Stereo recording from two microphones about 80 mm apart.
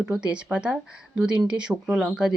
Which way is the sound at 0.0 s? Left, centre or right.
Centre.